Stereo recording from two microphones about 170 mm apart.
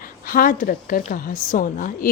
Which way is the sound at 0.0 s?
55° left (ahead or behind).